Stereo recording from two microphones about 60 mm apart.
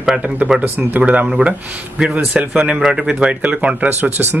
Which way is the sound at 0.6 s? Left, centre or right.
Right.